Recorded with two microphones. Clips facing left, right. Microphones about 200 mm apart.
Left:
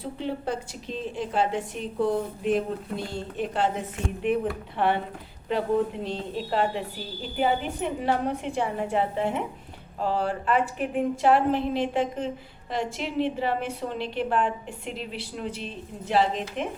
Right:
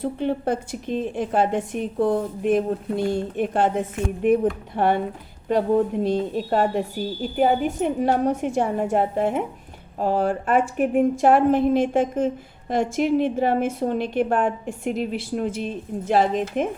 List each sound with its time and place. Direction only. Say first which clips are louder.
0.2 s a woman's voice: right 4 dB; 55° right (ahead or behind)